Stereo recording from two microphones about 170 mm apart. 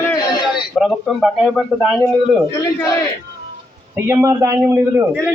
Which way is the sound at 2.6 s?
15° left (ahead or behind).